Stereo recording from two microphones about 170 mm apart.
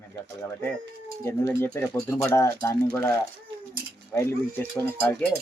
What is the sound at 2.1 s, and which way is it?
Speech, 15° left (ahead or behind).